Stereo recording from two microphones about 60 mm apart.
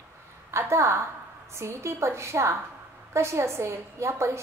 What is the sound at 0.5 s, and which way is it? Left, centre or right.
A woman's voice, right.